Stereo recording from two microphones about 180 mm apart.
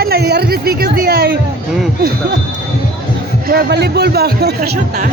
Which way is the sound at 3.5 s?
65° right (ahead or behind).